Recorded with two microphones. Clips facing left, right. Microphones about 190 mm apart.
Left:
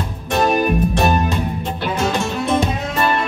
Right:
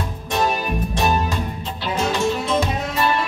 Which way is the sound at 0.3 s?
55° left (ahead or behind).